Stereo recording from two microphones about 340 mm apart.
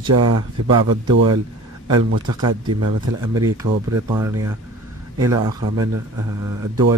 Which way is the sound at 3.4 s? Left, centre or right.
Centre.